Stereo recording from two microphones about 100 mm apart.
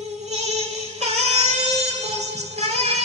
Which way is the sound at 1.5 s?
90° right.